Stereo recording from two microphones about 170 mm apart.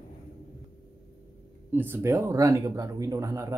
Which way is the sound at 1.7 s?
10° right (ahead or behind).